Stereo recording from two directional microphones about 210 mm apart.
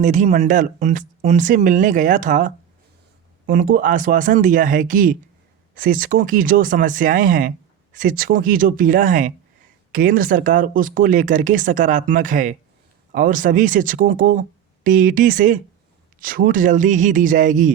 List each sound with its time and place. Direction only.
0.0 s speech: 35° right (ahead or behind)